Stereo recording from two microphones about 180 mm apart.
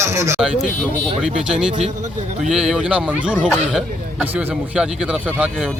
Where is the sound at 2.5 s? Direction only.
5° right (ahead or behind).